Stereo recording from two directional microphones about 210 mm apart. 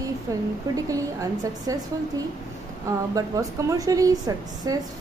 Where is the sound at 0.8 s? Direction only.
15° right (ahead or behind).